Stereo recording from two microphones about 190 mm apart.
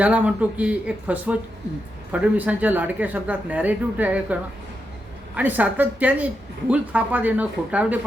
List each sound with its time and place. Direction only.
0.0 s a woman's voice: 5° right (ahead or behind)
5.4 s a woman's voice: 10° right (ahead or behind)